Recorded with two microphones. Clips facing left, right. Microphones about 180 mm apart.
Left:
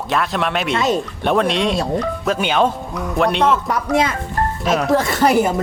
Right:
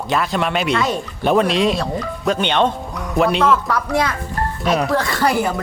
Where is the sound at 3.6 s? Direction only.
20° left (ahead or behind).